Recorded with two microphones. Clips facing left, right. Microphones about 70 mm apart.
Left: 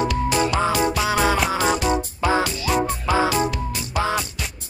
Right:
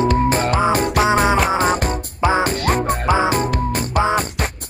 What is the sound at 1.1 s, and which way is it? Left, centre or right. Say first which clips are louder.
Music: right 5 dB; right.